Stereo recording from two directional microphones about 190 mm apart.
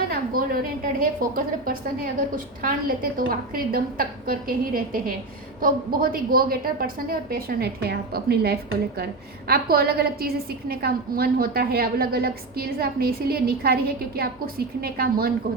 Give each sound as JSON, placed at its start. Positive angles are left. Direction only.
{"t": 0.1, "sound": "a woman's voice", "side_deg": -50}